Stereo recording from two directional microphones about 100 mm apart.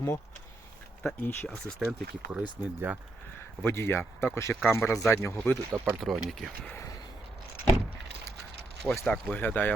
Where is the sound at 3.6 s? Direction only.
25° left (ahead or behind).